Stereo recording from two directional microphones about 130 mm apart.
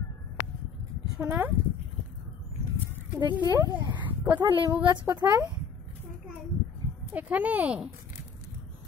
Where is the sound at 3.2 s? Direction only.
35° right (ahead or behind).